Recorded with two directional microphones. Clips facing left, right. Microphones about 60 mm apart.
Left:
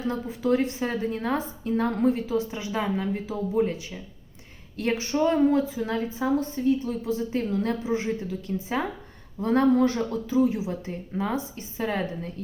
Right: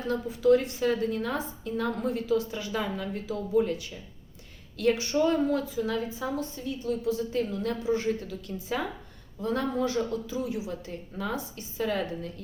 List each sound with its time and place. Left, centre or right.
0.1 s a woman's voice: left
7.9 s a woman's voice: left
9.4 s speech: left